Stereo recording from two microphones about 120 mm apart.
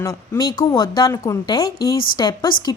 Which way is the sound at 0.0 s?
25° left (ahead or behind).